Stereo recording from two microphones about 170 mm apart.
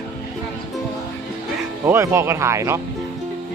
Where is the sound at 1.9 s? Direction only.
15° right (ahead or behind).